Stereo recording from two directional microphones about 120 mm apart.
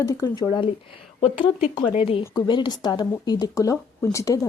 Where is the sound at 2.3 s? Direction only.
35° left (ahead or behind).